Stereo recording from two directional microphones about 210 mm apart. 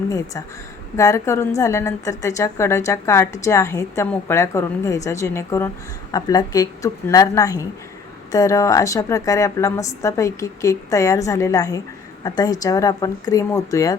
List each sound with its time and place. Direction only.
0.9 s a woman's voice: 15° left (ahead or behind)